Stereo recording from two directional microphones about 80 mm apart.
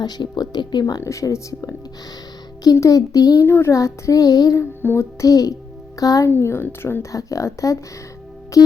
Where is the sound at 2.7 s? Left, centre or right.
Left.